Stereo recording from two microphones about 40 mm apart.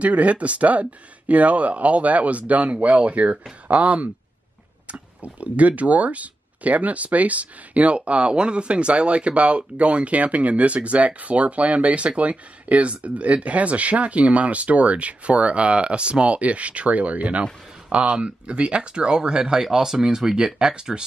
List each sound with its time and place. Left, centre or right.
0.0 s speech: right; by 20.8 s centre